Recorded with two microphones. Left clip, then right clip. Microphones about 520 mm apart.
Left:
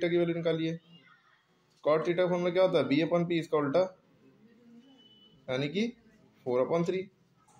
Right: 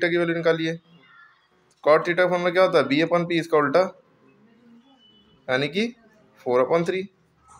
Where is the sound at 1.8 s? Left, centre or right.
Left.